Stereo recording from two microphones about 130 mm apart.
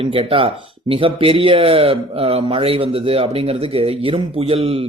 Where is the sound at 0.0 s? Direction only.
45° right (ahead or behind).